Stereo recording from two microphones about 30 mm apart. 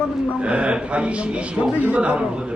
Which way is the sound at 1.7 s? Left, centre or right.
Right.